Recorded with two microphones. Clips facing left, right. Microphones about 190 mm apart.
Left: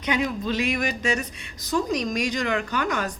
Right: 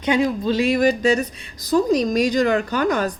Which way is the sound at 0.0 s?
30° right (ahead or behind).